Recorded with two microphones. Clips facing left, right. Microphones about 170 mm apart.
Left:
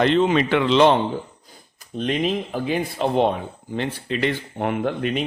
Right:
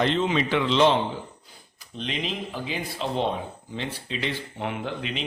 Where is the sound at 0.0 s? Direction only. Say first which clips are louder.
Left 6 dB; 60° left (ahead or behind).